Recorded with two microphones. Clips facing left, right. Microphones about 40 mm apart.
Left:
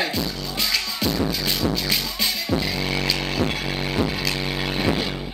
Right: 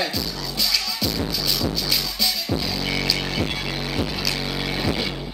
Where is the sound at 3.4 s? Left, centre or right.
Left.